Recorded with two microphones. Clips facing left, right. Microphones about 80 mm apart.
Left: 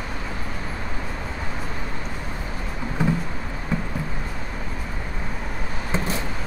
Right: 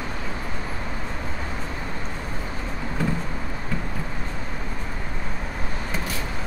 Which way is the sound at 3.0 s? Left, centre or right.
Centre.